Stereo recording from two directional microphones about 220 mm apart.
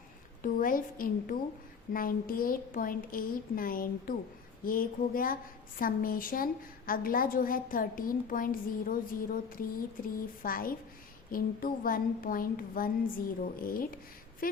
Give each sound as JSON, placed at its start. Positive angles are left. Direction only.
{"t": 0.4, "sound": "a woman's voice", "side_deg": 40}